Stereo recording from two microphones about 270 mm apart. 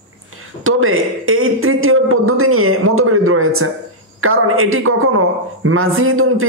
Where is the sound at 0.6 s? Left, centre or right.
Right.